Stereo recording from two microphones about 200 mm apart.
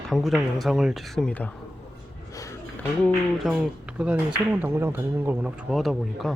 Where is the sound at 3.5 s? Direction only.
Centre (ahead or behind).